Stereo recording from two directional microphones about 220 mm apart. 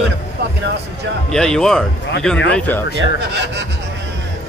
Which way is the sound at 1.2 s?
5° left (ahead or behind).